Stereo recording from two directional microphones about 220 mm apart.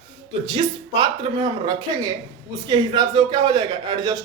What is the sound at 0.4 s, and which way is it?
Speech, 20° right (ahead or behind).